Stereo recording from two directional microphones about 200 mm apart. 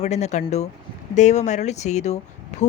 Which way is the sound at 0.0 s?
35° left (ahead or behind).